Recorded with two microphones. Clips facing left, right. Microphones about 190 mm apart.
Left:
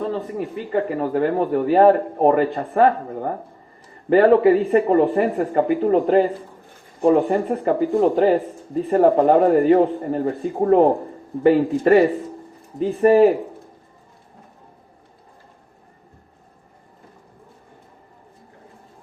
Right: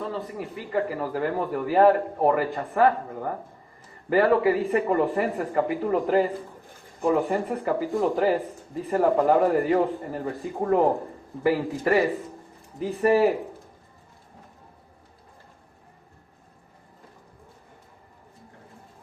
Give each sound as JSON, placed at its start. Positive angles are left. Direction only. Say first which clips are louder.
{"t": 0.0, "sound": "a man's voice", "louder": "left 7 dB", "side_deg": 35}